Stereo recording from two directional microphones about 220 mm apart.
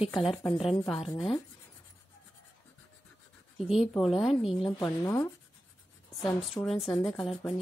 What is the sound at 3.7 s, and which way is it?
Speech, centre (ahead or behind).